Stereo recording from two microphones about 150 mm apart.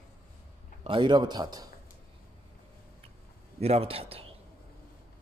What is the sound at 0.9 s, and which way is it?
Speech, 30° right (ahead or behind).